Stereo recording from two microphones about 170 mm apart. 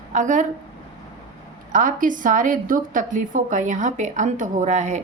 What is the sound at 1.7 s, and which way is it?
A woman's voice, 50° right (ahead or behind).